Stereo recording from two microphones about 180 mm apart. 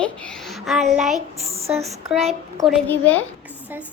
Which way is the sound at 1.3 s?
35° right (ahead or behind).